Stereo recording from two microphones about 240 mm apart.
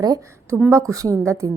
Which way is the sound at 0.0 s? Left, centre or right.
Centre.